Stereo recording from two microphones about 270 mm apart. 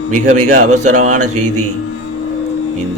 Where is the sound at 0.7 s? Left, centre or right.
Right.